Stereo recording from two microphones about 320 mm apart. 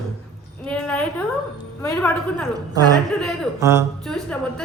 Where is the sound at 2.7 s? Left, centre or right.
Centre.